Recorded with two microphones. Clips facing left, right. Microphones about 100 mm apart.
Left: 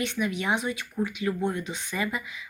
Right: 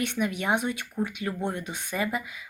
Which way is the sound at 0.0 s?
55° right (ahead or behind).